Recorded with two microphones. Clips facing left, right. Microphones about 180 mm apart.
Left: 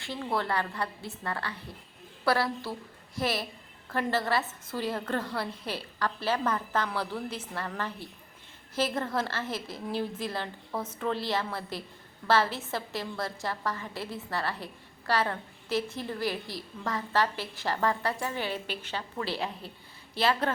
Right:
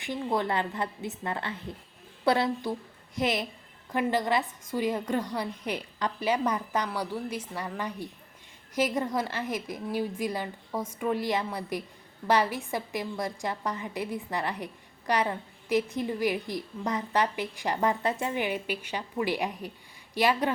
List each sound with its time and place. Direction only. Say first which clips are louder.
0.0 s a woman's voice: right 3 dB; 15° right (ahead or behind)